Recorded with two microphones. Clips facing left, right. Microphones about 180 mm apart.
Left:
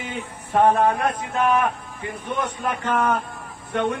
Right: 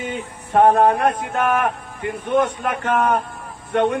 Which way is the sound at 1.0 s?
60° right (ahead or behind).